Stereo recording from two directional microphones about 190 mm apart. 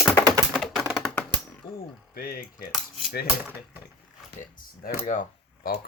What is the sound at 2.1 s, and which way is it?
Speech, 50° left (ahead or behind).